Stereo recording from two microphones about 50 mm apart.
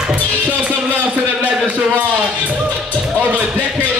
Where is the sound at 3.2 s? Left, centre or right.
Right.